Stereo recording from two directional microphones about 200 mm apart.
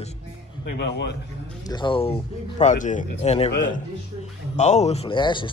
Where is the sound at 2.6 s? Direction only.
35° left (ahead or behind).